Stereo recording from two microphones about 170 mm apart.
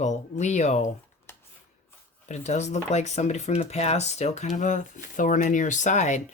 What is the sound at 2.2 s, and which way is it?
Speech, 40° left (ahead or behind).